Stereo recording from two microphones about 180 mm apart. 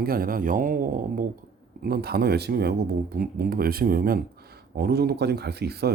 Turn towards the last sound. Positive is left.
turn(degrees=-65)  # may be behind; listen again after turning